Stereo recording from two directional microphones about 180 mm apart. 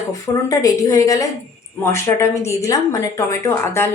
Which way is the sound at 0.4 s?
20° left (ahead or behind).